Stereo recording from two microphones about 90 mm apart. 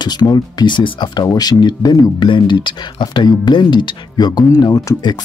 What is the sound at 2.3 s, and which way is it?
Speech, 60° left (ahead or behind).